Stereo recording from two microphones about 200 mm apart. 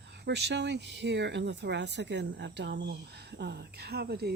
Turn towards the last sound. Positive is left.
turn(degrees=-50)  # may be behind; listen again after turning